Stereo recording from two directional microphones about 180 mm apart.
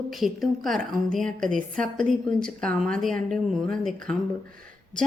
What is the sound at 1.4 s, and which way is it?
Speech, 45° right (ahead or behind).